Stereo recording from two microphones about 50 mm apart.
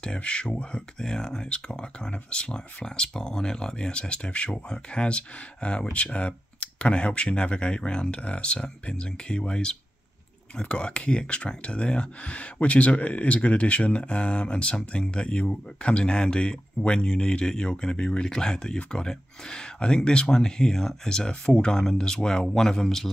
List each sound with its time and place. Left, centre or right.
0.0 s speech: centre